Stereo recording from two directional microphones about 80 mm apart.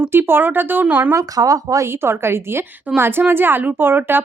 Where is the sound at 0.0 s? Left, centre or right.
Right.